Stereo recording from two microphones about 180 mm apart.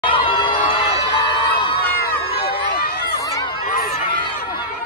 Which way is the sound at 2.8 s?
55° left (ahead or behind).